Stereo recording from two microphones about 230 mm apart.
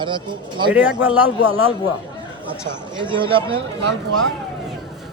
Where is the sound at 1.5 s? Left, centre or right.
Right.